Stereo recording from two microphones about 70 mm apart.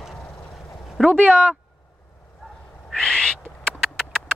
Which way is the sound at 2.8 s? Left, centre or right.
Centre.